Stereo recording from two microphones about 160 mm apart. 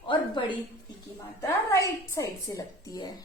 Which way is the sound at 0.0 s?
30° left (ahead or behind).